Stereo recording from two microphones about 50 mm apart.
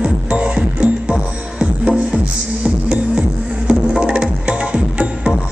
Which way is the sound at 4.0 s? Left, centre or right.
Centre.